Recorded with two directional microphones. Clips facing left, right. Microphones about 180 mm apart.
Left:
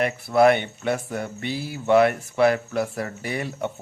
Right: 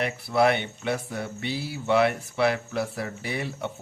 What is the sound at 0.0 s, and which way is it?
Speech, 50° left (ahead or behind).